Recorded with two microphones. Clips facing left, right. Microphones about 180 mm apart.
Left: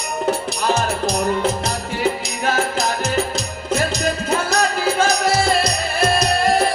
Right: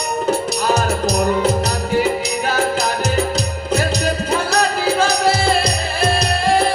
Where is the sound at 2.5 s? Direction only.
35° right (ahead or behind).